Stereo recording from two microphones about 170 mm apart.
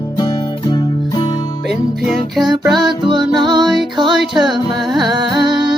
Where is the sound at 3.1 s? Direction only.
25° right (ahead or behind).